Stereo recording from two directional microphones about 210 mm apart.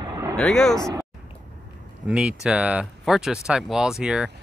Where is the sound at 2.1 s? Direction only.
5° right (ahead or behind).